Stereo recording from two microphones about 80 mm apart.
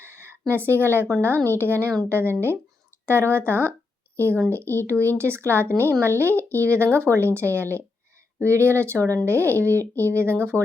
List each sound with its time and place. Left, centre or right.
0.0 s a sound: right
1.5 s a woman's voice: right
10.5 s speech: centre